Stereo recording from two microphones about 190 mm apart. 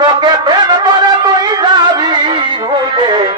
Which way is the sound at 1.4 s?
20° right (ahead or behind).